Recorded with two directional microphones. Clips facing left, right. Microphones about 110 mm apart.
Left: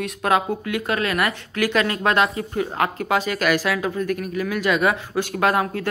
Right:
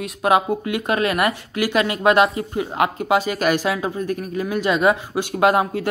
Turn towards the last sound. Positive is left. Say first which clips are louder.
# right 3 dB
turn(degrees=-20)  # may be behind; listen again after turning